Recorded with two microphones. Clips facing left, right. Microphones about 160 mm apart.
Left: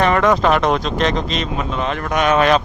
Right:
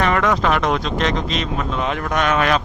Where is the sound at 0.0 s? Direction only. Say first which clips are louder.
Left 3 dB; 30° left (ahead or behind).